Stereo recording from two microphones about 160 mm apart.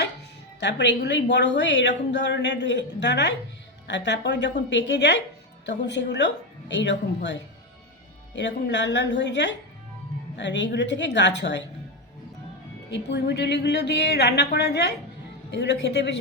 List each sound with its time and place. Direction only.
0.6 s a woman's voice: 90° left
8.4 s a woman's voice: 90° left
12.9 s a woman's voice: 90° left